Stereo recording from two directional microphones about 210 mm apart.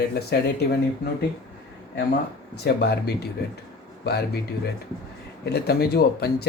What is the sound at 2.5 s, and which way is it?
Speech, 50° left (ahead or behind).